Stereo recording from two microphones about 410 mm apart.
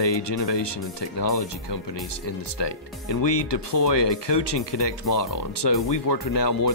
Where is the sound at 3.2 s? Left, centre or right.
Left.